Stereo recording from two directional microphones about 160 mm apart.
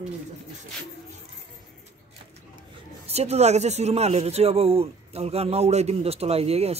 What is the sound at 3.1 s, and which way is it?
Speech, 40° right (ahead or behind).